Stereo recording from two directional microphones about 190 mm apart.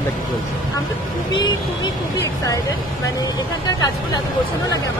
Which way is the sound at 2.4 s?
15° left (ahead or behind).